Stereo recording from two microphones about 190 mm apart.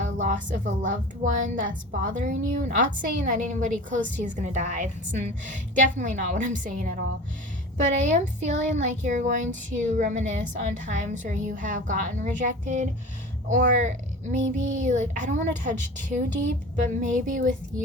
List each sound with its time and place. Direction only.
0.0 s speech: 40° right (ahead or behind)
8.1 s speech: 40° right (ahead or behind)